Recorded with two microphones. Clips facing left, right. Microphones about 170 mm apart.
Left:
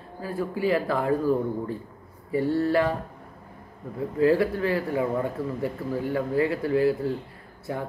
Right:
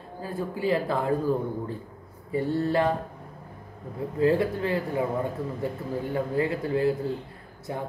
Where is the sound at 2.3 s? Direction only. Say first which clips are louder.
Left 2 dB; 20° right (ahead or behind).